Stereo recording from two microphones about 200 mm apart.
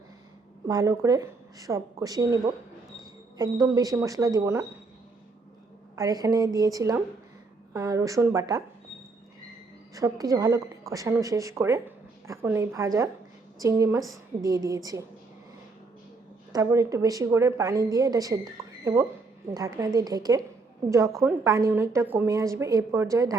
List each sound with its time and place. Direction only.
0.7 s a woman's voice: 15° right (ahead or behind)
6.0 s a woman's voice: 15° right (ahead or behind)
9.9 s a woman's voice: 15° right (ahead or behind)
16.5 s a woman's voice: 15° right (ahead or behind)
19.5 s a woman's voice: 15° right (ahead or behind)